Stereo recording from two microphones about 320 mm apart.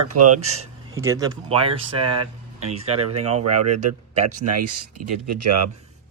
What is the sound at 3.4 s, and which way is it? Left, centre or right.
Speech, right.